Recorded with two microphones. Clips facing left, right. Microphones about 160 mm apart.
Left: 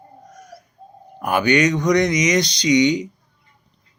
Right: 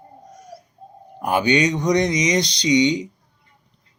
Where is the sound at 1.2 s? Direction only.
20° right (ahead or behind).